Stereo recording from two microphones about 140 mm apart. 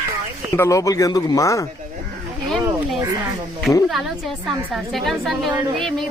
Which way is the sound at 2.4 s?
Centre (ahead or behind).